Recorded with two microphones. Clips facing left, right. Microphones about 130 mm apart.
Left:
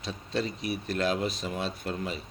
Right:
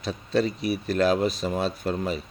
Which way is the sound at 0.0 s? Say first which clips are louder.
Right 7 dB; 40° right (ahead or behind).